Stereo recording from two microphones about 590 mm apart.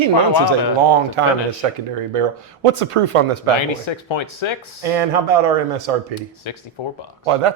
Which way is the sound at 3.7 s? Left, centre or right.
Left.